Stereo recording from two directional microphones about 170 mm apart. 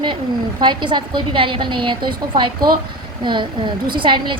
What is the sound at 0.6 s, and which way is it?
A woman's voice, 25° right (ahead or behind).